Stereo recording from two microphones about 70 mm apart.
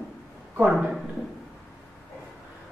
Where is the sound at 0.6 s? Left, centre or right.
Centre.